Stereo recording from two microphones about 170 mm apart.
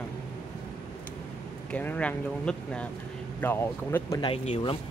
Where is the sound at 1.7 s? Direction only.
10° left (ahead or behind).